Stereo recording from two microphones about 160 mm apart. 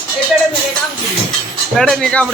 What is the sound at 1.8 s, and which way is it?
Speech, 5° left (ahead or behind).